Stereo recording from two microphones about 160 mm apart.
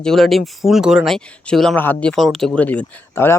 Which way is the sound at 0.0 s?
Centre (ahead or behind).